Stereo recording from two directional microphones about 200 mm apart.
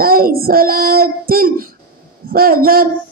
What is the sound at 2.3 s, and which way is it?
Speech, 45° right (ahead or behind).